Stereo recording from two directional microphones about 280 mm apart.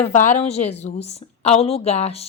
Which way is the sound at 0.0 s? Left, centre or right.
Left.